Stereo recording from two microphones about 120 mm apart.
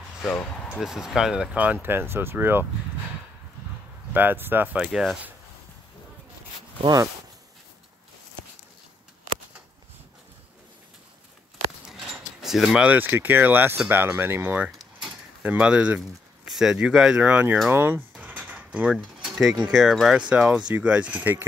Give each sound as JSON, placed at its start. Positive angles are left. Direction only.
{"t": 0.2, "sound": "speech", "side_deg": 15}
{"t": 0.7, "sound": "speech", "side_deg": -5}
{"t": 4.1, "sound": "speech", "side_deg": -15}
{"t": 4.7, "sound": "speech", "side_deg": -5}
{"t": 11.8, "sound": "speech", "side_deg": 0}
{"t": 15.0, "sound": "a sound", "side_deg": -10}
{"t": 16.4, "sound": "speech", "side_deg": -5}
{"t": 18.2, "sound": "a sound", "side_deg": -10}
{"t": 19.2, "sound": "mechanisms", "side_deg": -5}
{"t": 19.7, "sound": "speech", "side_deg": -5}